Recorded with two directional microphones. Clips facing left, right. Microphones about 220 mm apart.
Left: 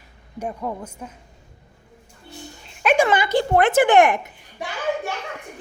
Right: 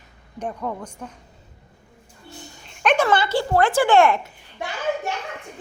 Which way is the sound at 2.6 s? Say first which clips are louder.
Left 1 dB; 10° left (ahead or behind).